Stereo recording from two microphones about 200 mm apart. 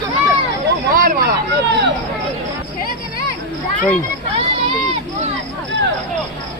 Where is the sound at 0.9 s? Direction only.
45° right (ahead or behind).